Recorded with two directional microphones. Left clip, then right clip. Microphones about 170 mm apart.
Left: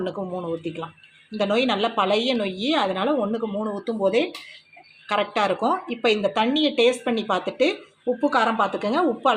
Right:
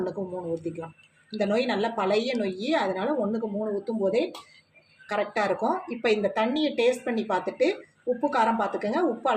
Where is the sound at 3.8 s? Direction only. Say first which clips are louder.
Left 5 dB; 50° left (ahead or behind).